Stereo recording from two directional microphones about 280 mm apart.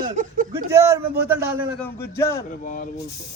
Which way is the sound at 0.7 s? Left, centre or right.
Centre.